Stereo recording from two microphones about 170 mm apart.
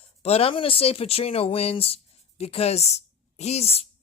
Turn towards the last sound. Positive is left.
turn(degrees=35)  # may be behind; listen again after turning